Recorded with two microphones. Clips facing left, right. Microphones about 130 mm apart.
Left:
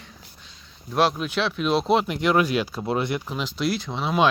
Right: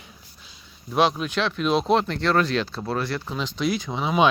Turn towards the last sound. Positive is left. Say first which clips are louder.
# right 1 dB
turn(degrees=0)  # may be behind; listen again after turning